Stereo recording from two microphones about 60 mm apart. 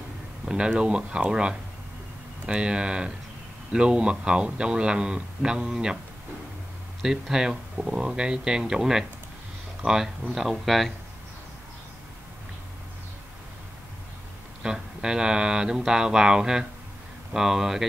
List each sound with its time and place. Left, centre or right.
0.5 s speech: centre
7.0 s speech: centre
14.6 s speech: centre